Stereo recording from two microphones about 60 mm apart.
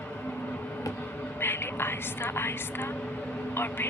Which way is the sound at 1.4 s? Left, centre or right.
Left.